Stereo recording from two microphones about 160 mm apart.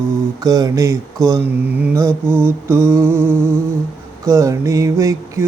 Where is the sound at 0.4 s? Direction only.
20° right (ahead or behind).